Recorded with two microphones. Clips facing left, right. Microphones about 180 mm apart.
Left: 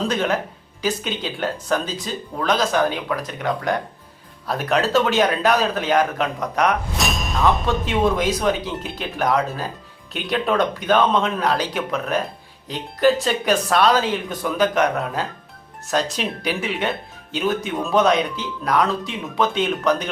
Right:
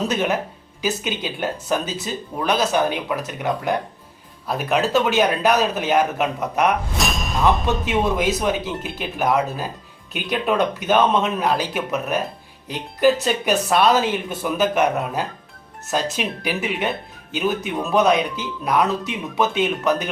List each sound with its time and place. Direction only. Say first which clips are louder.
0.8 s speech: even; 5° right (ahead or behind)
5.2 s speech: even; 15° right (ahead or behind)
5.5 s speech: even; 5° right (ahead or behind)